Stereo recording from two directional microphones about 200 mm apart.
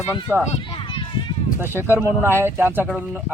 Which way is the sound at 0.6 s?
25° left (ahead or behind).